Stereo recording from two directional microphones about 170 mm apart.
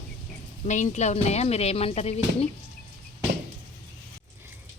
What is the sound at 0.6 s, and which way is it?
Speech, 45° left (ahead or behind).